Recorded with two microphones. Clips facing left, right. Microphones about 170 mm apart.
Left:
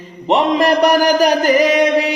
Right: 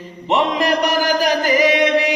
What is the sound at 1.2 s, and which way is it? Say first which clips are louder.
Music: left 3 dB; 45° left (ahead or behind).